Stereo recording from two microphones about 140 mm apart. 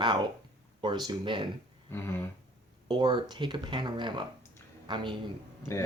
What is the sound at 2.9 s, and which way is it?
Speech, 30° right (ahead or behind).